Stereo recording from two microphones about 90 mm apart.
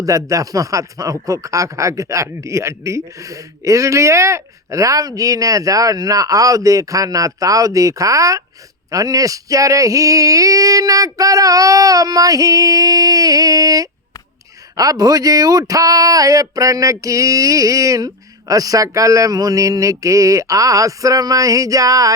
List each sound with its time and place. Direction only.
0.0 s speech: 40° right (ahead or behind)